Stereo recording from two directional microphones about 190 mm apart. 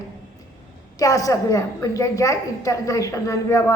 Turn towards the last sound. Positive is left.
turn(degrees=15)  # may be behind; listen again after turning